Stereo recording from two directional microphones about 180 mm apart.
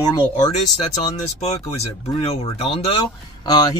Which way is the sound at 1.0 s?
40° left (ahead or behind).